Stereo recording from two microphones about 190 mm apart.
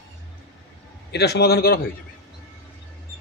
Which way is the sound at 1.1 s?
60° left (ahead or behind).